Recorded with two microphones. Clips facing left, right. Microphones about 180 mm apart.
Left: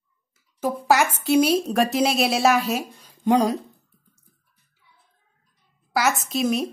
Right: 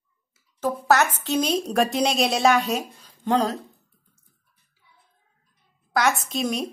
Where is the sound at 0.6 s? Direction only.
10° left (ahead or behind).